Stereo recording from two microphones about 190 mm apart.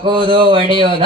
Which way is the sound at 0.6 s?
25° left (ahead or behind).